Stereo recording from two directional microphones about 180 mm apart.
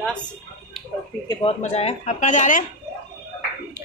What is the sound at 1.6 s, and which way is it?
Speech, 35° left (ahead or behind).